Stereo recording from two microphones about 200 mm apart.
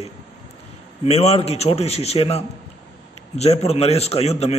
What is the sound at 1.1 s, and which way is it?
A man's voice, 30° left (ahead or behind).